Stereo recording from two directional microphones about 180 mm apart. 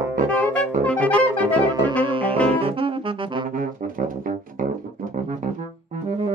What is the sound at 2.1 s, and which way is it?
Saxophone, 30° right (ahead or behind).